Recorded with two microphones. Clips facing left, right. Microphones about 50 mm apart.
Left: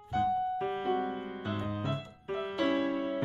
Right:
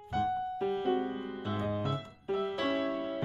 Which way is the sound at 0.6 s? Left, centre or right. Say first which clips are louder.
Right 2 dB; centre.